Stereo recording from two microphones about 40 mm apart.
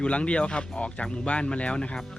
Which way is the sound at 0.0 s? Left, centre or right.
Left.